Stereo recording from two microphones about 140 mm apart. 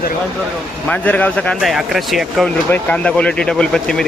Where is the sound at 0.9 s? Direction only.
10° left (ahead or behind).